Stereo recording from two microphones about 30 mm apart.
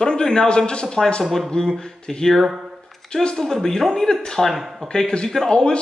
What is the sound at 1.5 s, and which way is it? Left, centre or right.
A man's voice, left.